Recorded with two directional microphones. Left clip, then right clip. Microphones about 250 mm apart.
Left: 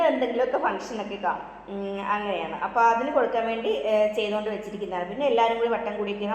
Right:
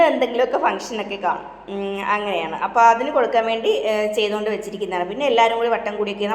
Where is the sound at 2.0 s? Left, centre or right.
Right.